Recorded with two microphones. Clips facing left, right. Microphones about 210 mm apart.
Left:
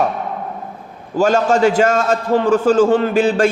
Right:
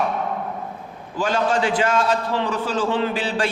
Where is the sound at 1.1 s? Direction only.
45° left (ahead or behind).